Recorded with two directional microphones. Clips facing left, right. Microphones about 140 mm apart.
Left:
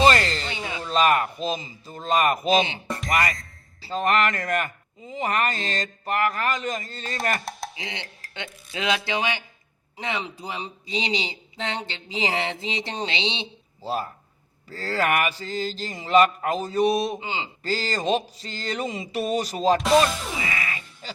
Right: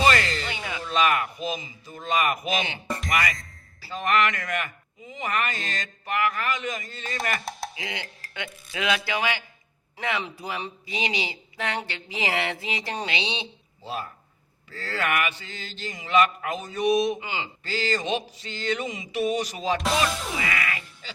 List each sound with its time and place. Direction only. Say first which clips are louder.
0.0 s a sound: left 3 dB; 35° left (ahead or behind)
2.5 s mantra: left 7 dB; 30° left (ahead or behind)
2.8 s music: even; centre (ahead or behind)
3.8 s mantra: left 2 dB; 35° left (ahead or behind)
7.8 s speech: right 1 dB; 25° left (ahead or behind)
13.8 s mantra: left 5 dB; 35° left (ahead or behind)
17.6 s mantra: left 1 dB; 40° left (ahead or behind)
20.1 s music: even; centre (ahead or behind)
20.4 s music: right 1 dB; 30° left (ahead or behind)